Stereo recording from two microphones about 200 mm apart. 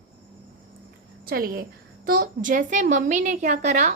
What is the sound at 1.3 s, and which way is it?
A woman's voice, 50° right (ahead or behind).